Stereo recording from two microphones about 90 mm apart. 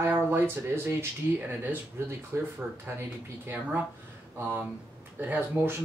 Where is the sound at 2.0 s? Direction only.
30° right (ahead or behind).